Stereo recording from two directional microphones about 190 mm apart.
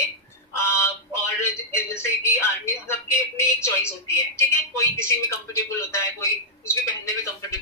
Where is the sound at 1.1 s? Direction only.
15° left (ahead or behind).